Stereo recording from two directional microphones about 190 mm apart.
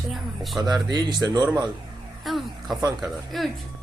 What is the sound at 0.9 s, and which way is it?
Speech, 20° right (ahead or behind).